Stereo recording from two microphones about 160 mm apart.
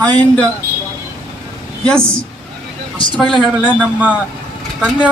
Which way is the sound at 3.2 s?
5° left (ahead or behind).